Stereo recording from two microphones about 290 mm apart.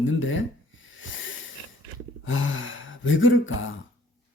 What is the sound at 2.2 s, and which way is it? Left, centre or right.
Gasp, left.